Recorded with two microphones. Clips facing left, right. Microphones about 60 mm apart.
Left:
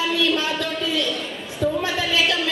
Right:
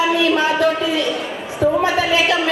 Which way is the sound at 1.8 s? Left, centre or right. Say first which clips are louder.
Right 5 dB; centre.